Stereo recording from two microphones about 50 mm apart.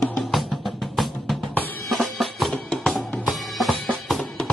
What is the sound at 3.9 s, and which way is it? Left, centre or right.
Drum, centre.